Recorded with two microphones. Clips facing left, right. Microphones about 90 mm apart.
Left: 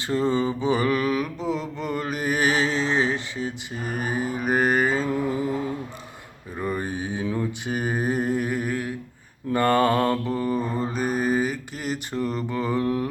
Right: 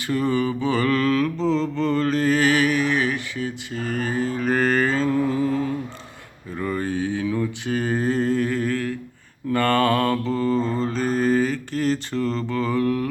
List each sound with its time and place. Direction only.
0.1 s mantra: 20° left (ahead or behind)
6.6 s a sound: 20° left (ahead or behind)
7.3 s mantra: 20° left (ahead or behind)